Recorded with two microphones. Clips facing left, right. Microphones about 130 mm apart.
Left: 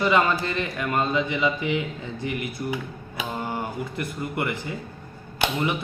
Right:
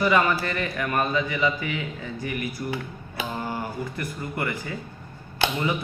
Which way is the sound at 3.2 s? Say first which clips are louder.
Left 1 dB; 20° left (ahead or behind).